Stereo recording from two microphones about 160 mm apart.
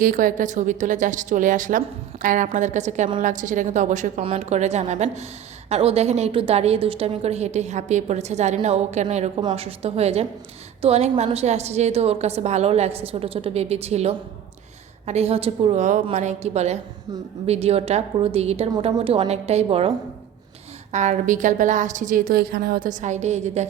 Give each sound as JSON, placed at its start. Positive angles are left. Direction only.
{"t": 0.0, "sound": "a woman's voice", "side_deg": -55}
{"t": 9.4, "sound": "a woman's voice", "side_deg": -30}
{"t": 20.9, "sound": "a woman's voice", "side_deg": -45}